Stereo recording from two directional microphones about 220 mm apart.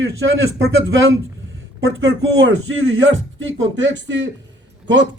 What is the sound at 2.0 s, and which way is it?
A man's voice, 55° right (ahead or behind).